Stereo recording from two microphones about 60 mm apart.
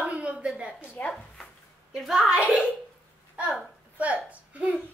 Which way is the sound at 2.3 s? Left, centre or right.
Centre.